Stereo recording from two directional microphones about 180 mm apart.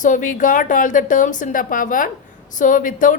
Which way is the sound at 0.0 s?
45° left (ahead or behind).